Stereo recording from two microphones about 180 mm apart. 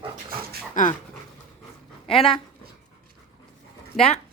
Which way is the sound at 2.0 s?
30° left (ahead or behind).